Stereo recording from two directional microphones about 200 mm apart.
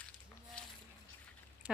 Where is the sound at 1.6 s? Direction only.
5° right (ahead or behind).